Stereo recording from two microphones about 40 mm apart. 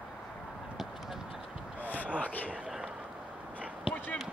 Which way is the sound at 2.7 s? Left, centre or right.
Centre.